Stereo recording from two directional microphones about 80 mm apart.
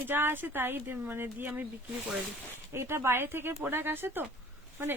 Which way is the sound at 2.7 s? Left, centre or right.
Right.